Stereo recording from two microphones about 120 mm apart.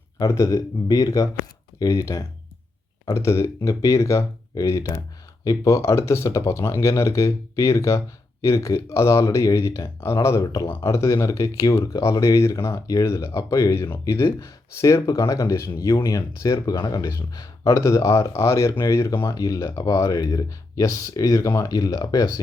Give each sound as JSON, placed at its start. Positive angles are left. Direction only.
{"t": 0.2, "sound": "speech", "side_deg": 25}